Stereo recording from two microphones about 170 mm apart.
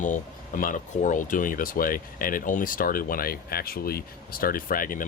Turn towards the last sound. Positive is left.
turn(degrees=55)  # may be behind; listen again after turning